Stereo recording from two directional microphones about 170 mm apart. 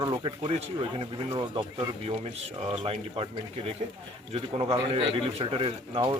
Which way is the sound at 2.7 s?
35° right (ahead or behind).